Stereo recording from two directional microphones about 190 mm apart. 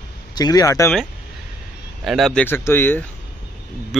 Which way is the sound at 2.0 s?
Centre (ahead or behind).